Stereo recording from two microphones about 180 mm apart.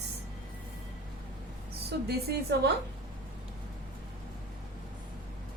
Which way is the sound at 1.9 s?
70° right (ahead or behind).